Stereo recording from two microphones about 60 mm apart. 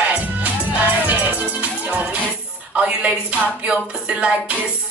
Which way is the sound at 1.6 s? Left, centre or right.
Right.